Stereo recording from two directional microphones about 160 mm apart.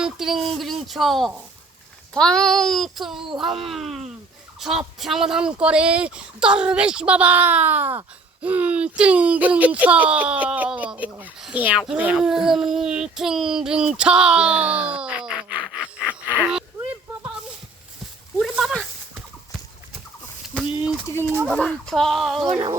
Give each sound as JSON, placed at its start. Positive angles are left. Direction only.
{"t": 0.0, "sound": "speech", "side_deg": 0}
{"t": 18.3, "sound": "a sound", "side_deg": 0}
{"t": 21.1, "sound": "speech", "side_deg": 20}
{"t": 21.5, "sound": "speech", "side_deg": 5}